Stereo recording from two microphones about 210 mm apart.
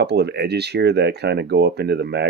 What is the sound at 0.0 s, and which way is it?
Speech, 55° right (ahead or behind).